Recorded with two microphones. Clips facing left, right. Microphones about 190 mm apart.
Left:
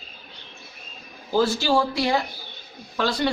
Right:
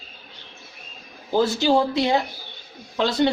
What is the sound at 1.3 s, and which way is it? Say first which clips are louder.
Speech: right 2 dB; 20° right (ahead or behind).